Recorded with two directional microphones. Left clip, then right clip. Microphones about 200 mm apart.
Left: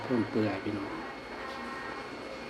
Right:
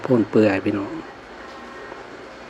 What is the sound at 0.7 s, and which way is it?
Speech, 40° right (ahead or behind).